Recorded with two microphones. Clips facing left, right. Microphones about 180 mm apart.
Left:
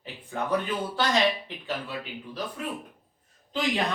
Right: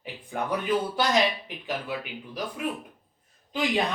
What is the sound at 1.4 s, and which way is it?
Speech, 15° right (ahead or behind).